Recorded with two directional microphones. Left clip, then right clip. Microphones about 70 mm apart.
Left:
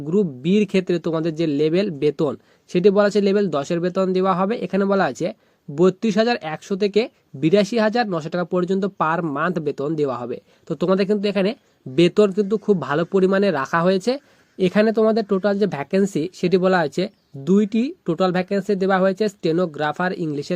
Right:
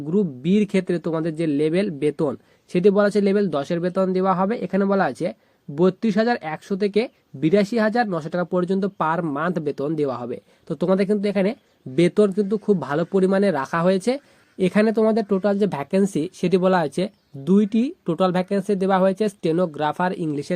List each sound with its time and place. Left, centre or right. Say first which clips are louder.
0.1 s speech: left 2 dB; left
2.2 s speech: left 1 dB; left